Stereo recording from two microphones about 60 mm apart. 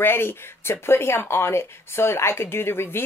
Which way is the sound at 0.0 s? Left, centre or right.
Left.